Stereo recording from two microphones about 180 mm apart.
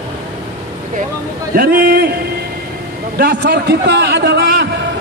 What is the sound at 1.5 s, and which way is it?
Speech, 55° right (ahead or behind).